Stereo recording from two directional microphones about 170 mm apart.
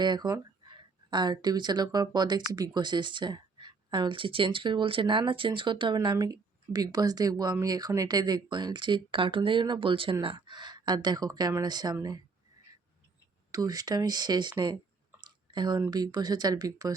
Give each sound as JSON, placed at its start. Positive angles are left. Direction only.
{"t": 0.0, "sound": "speech", "side_deg": -25}
{"t": 13.5, "sound": "speech", "side_deg": -20}
{"t": 15.2, "sound": "a sound", "side_deg": -25}
{"t": 15.9, "sound": "speech", "side_deg": -25}